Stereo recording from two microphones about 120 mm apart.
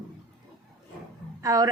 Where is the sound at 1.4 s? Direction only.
30° right (ahead or behind).